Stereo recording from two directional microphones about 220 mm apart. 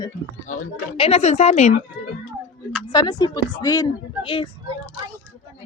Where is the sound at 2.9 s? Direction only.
20° left (ahead or behind).